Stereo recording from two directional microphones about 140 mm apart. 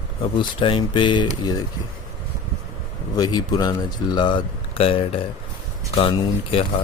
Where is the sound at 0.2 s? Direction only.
40° left (ahead or behind).